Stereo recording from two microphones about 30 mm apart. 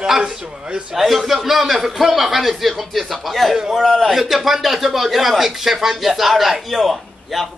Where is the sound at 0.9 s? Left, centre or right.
Centre.